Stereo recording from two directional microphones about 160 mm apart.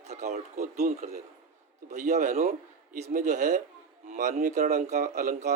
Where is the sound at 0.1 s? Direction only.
45° right (ahead or behind).